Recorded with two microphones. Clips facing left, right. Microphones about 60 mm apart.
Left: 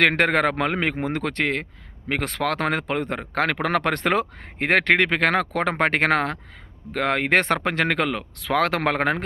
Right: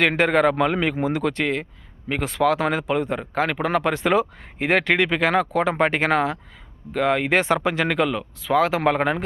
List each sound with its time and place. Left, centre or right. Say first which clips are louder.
0.0 s speech: right 1 dB; left
2.0 s speech: right 4 dB; left